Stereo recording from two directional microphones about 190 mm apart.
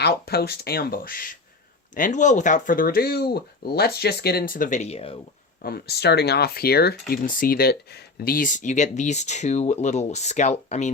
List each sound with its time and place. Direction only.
0.0 s speech: 55° left (ahead or behind); by 5.2 s 30° left (ahead or behind)
5.6 s speech: 55° left (ahead or behind); by 10.9 s 40° left (ahead or behind)